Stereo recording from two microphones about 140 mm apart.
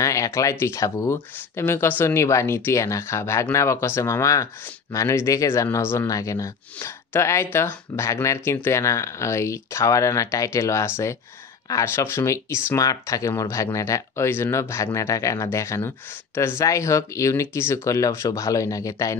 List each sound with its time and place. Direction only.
0.0 s speech: 20° left (ahead or behind)